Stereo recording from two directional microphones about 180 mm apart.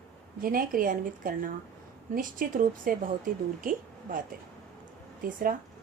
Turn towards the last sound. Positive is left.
turn(degrees=-50)  # may be behind; listen again after turning